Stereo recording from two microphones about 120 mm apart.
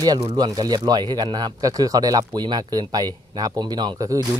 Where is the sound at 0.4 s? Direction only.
35° right (ahead or behind).